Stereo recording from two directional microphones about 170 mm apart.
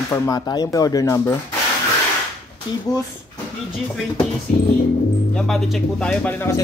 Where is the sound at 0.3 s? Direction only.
20° left (ahead or behind).